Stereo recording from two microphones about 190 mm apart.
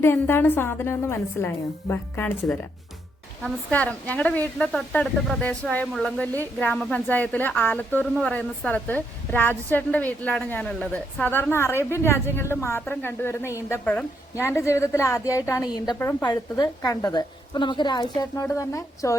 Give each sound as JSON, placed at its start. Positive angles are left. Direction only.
{"t": 0.0, "sound": "a woman's voice", "side_deg": 10}